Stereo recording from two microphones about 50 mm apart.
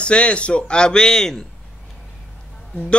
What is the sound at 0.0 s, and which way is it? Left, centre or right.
A man's voice, left.